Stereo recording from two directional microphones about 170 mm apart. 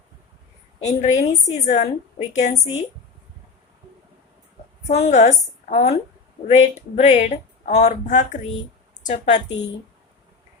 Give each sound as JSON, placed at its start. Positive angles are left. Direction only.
{"t": 1.0, "sound": "speech", "side_deg": 45}
{"t": 4.9, "sound": "a woman's voice", "side_deg": 40}